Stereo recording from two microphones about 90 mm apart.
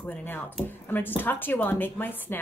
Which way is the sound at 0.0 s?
20° left (ahead or behind).